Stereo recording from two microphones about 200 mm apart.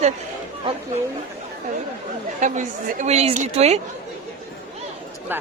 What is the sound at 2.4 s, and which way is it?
Speech, 40° right (ahead or behind).